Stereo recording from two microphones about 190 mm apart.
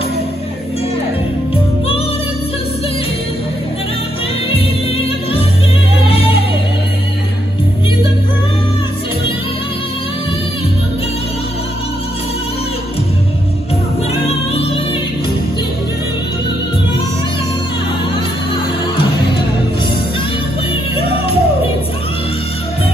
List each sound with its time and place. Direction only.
4.6 s music: 30° left (ahead or behind)
14.2 s music: 30° left (ahead or behind)
20.9 s music: 30° left (ahead or behind)